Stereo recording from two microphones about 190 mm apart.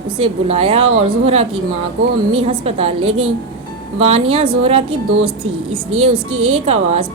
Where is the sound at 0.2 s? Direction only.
30° right (ahead or behind).